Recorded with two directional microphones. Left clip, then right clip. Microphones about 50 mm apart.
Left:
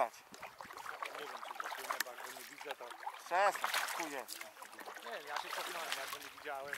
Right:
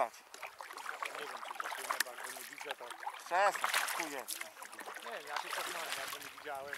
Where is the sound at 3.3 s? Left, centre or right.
Centre.